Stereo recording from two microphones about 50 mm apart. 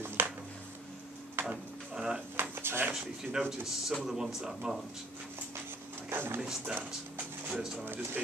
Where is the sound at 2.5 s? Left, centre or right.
Right.